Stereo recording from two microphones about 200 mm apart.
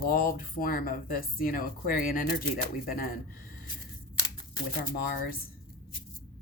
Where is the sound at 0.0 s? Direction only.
45° left (ahead or behind).